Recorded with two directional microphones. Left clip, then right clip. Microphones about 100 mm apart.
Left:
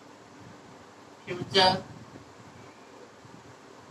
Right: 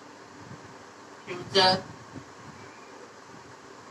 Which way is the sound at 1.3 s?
30° right (ahead or behind).